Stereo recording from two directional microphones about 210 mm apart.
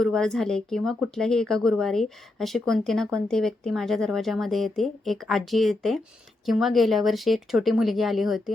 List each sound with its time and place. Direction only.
0.0 s a woman's voice: centre (ahead or behind)